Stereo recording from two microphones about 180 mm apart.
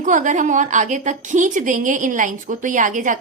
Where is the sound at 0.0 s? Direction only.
45° right (ahead or behind).